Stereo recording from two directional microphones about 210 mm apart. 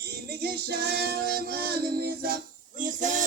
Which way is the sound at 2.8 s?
35° right (ahead or behind).